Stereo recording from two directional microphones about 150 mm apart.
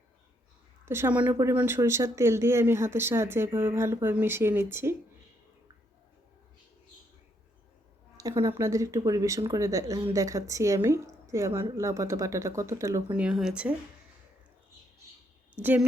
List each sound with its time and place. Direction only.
0.9 s speech: 15° right (ahead or behind)
8.1 s a woman's voice: 20° right (ahead or behind)
13.1 s speech: 5° right (ahead or behind)
15.5 s speech: 10° right (ahead or behind)